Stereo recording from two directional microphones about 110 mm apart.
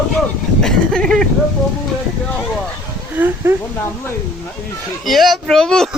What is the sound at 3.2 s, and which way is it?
Speech, 15° right (ahead or behind).